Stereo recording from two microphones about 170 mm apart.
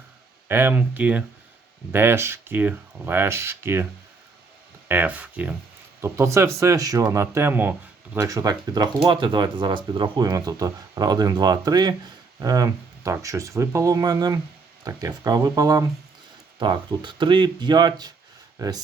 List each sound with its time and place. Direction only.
0.4 s speech: 10° right (ahead or behind)
4.9 s speech: 10° right (ahead or behind); by 18.1 s 25° right (ahead or behind)